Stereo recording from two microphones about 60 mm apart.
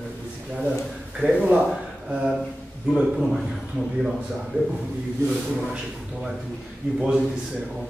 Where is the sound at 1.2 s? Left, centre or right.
Right.